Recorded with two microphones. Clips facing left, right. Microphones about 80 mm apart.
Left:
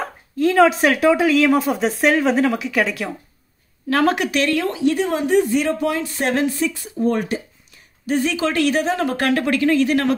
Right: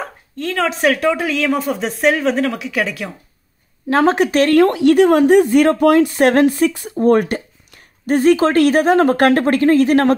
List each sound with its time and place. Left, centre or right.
0.0 s speech: centre
3.9 s speech: right
4.5 s a woman's voice: right